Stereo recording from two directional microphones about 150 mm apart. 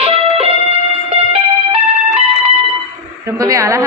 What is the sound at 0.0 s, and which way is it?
Music, 40° right (ahead or behind).